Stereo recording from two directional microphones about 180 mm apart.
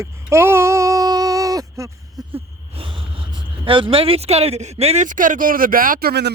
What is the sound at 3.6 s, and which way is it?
Speech, 30° right (ahead or behind).